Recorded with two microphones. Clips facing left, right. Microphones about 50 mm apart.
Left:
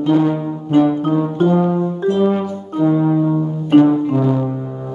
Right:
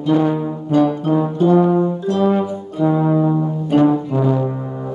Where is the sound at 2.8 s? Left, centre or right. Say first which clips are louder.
Left 1 dB; centre.